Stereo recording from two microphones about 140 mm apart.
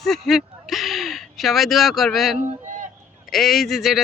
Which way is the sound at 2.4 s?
60° right (ahead or behind).